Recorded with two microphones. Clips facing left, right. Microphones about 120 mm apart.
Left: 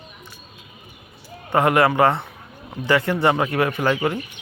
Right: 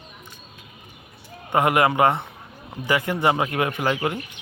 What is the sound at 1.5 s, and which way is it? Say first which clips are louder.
A man's voice: left 2 dB; 15° right (ahead or behind).